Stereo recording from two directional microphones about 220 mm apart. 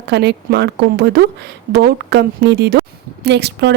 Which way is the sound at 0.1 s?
50° right (ahead or behind).